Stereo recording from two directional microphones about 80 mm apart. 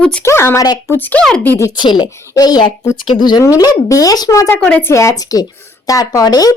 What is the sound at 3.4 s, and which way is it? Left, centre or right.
Speech, left.